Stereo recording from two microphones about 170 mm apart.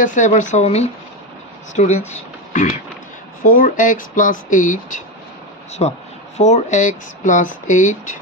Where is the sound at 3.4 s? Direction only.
50° left (ahead or behind).